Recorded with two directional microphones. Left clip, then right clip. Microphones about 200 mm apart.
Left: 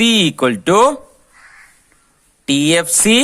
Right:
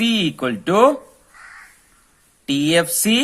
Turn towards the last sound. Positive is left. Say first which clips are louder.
# left 4 dB
turn(degrees=35)  # may be behind; listen again after turning